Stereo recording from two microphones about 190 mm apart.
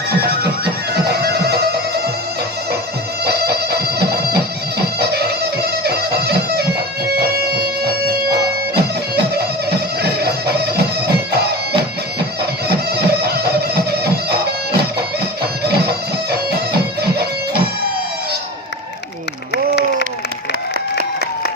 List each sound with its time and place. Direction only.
1.0 s music: 55° right (ahead or behind)
3.2 s music: 55° right (ahead or behind)
9.3 s music: 55° right (ahead or behind)